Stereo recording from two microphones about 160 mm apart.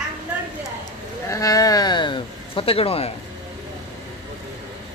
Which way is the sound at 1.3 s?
20° left (ahead or behind).